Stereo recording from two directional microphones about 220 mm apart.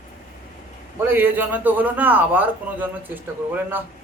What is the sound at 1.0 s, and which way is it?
A man's voice, 10° right (ahead or behind).